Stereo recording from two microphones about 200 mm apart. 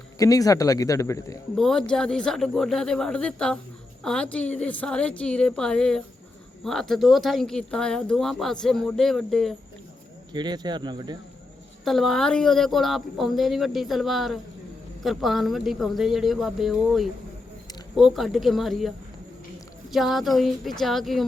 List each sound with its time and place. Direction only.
0.2 s speech: 15° left (ahead or behind)
1.5 s speech: centre (ahead or behind)
10.3 s speech: 20° right (ahead or behind)
11.9 s speech: centre (ahead or behind)